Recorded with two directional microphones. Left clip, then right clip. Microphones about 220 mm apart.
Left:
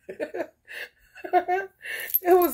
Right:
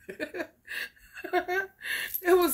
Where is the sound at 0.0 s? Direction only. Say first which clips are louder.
Left 4 dB; 35° right (ahead or behind).